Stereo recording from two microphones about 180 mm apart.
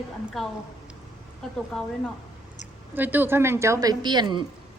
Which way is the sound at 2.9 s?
10° right (ahead or behind).